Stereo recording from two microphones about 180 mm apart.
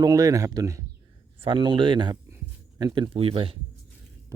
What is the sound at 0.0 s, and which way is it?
Speech, 20° right (ahead or behind).